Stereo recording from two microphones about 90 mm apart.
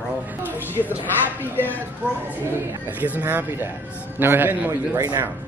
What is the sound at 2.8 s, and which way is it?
A man's voice, 20° right (ahead or behind).